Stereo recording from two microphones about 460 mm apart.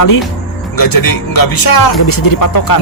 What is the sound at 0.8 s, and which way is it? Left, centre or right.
Speech, left.